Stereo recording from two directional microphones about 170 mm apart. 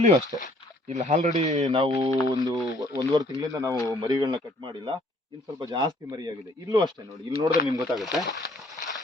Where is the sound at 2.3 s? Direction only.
20° right (ahead or behind).